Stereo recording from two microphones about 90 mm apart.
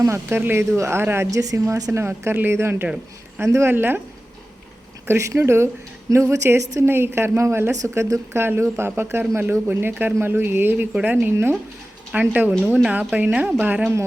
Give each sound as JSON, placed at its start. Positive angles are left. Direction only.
{"t": 0.0, "sound": "a woman's voice", "side_deg": -30}
{"t": 1.3, "sound": "a woman's voice", "side_deg": -40}
{"t": 2.8, "sound": "speech", "side_deg": -10}
{"t": 3.4, "sound": "a woman's voice", "side_deg": -30}
{"t": 5.0, "sound": "a woman's voice", "side_deg": -30}